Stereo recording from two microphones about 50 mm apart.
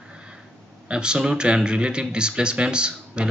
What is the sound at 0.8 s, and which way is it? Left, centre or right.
Speech, centre.